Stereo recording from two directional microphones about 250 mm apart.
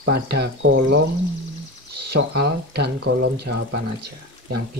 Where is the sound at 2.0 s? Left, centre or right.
Right.